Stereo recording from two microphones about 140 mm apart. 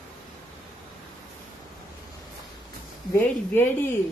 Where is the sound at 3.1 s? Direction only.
15° left (ahead or behind).